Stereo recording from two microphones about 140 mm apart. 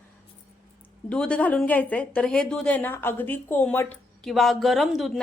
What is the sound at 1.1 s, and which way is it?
A woman's voice, 10° left (ahead or behind).